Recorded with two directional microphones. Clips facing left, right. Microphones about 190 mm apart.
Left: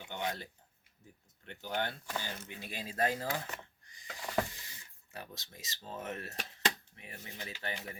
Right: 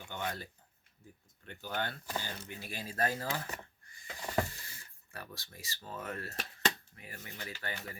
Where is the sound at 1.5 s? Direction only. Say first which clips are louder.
Left 1 dB; 20° left (ahead or behind).